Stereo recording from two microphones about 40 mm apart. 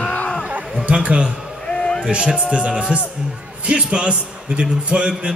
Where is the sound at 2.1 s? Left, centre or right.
Right.